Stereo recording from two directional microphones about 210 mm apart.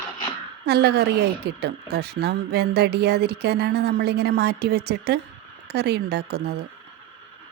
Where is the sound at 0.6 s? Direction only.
50° right (ahead or behind).